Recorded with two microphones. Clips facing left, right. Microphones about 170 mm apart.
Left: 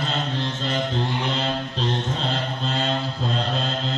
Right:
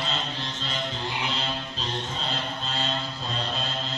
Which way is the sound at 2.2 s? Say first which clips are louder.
Left 5 dB; 55° left (ahead or behind).